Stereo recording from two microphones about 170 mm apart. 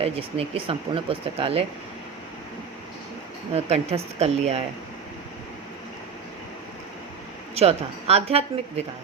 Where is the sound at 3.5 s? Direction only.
40° right (ahead or behind).